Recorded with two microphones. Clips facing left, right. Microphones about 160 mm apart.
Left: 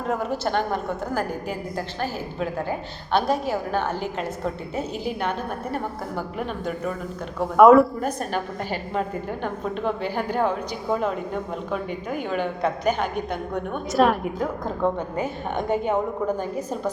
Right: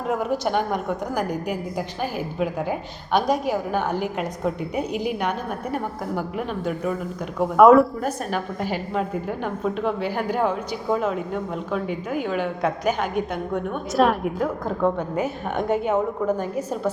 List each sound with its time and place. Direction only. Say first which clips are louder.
0.1 s a woman's voice: right 2 dB; 10° right (ahead or behind)
7.5 s a woman's voice: even; centre (ahead or behind)
15.1 s a woman's voice: right 2 dB; 5° right (ahead or behind)